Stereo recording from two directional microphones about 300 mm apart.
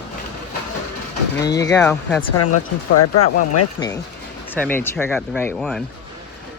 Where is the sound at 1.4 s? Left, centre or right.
Centre.